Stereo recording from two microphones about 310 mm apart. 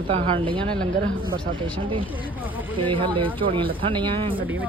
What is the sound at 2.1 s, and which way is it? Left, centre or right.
Speech, centre.